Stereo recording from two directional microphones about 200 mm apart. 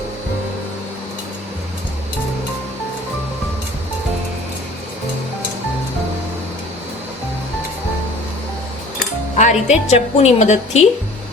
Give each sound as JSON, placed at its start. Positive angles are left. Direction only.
{"t": 9.4, "sound": "a woman's voice", "side_deg": 35}